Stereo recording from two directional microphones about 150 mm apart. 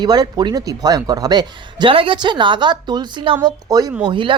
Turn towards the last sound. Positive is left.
turn(degrees=-35)  # may be behind; listen again after turning